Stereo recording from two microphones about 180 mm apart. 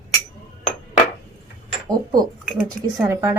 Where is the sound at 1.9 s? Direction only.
20° right (ahead or behind).